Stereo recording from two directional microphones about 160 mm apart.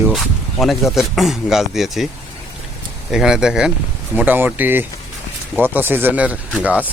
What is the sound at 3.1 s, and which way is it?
Speech, 5° right (ahead or behind).